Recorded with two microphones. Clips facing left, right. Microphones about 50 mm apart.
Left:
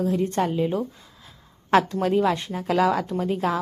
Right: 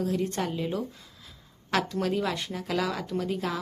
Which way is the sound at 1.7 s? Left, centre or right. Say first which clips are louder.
Left 8 dB; left.